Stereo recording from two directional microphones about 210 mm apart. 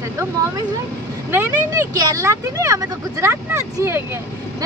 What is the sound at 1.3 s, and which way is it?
Speech, 10° right (ahead or behind).